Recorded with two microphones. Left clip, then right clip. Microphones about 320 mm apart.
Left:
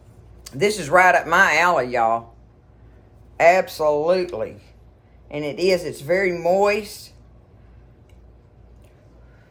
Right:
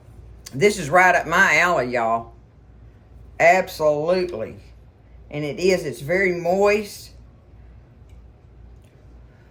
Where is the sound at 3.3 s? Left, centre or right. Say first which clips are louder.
Left 1 dB; centre.